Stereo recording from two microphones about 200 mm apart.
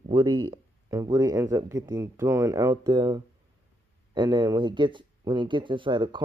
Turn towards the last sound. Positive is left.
turn(degrees=-25)  # may be behind; listen again after turning